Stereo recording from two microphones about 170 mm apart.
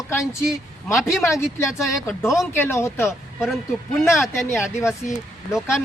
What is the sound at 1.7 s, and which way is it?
Speech, centre (ahead or behind).